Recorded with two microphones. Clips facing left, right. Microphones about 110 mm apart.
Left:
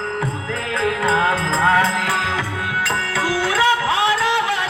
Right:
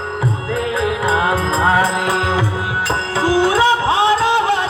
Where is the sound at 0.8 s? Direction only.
10° right (ahead or behind); by 4.6 s 30° right (ahead or behind).